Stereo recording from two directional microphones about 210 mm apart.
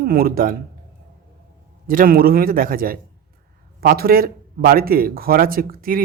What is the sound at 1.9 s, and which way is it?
Speech, 40° right (ahead or behind).